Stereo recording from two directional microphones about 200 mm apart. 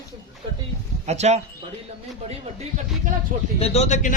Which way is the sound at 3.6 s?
30° left (ahead or behind).